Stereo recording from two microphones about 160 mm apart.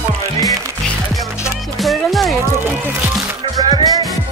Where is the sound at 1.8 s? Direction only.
Centre (ahead or behind).